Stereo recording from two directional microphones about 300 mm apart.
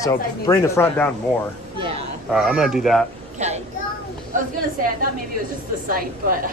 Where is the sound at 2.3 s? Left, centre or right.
Centre.